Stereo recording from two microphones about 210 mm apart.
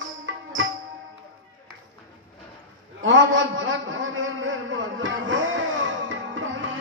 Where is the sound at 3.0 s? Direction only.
65° right (ahead or behind).